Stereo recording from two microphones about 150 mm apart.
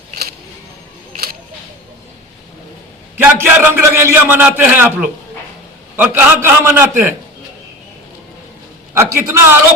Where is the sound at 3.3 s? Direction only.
15° right (ahead or behind).